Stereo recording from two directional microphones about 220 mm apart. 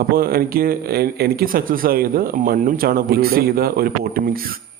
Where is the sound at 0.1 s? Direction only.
45° right (ahead or behind).